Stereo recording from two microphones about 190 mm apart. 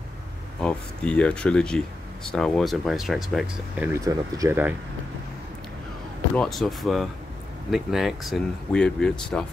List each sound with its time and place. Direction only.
0.7 s speech: 5° left (ahead or behind); by 4.7 s 10° right (ahead or behind)
6.3 s speech: centre (ahead or behind)